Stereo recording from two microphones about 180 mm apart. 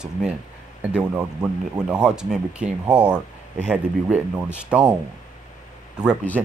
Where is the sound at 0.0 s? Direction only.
5° right (ahead or behind).